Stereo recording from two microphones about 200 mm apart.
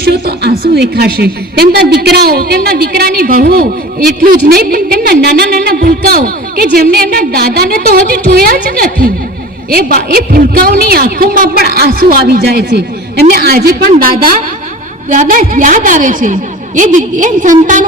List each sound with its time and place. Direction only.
0.0 s a woman's voice: 55° right (ahead or behind)